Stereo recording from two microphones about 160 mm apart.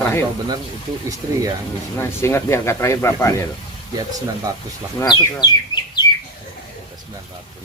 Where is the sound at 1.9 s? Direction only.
15° left (ahead or behind).